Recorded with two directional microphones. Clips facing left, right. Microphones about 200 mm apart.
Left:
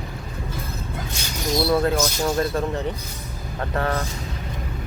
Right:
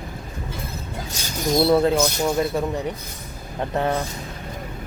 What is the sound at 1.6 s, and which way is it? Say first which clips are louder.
Speech: right 3 dB; 20° right (ahead or behind).